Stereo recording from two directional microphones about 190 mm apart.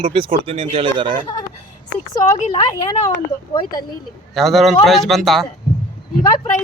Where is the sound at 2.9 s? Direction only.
20° left (ahead or behind).